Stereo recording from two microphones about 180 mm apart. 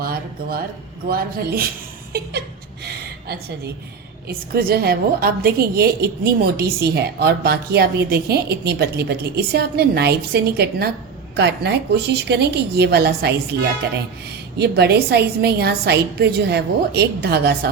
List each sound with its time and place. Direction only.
0.0 s a woman's voice: 55° right (ahead or behind)
4.3 s a woman's voice: 60° right (ahead or behind)
14.6 s a woman's voice: 65° right (ahead or behind)